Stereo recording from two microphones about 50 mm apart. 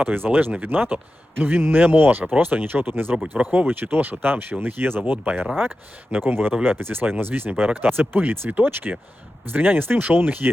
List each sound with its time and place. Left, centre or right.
0.0 s speech: right
3.3 s speech: right
5.1 s speech: right
6.1 s speech: right